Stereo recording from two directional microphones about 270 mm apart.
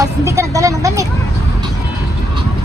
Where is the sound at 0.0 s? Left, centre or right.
Centre.